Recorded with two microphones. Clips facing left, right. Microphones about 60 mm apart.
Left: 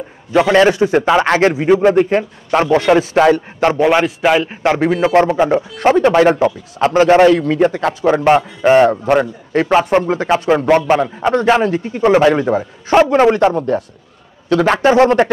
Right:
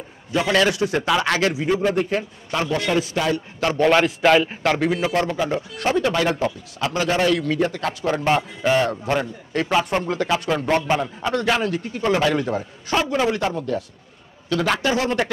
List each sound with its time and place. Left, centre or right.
0.5 s a man's voice: left
3.2 s a man's voice: left
3.7 s a man's voice: centre
4.6 s a man's voice: left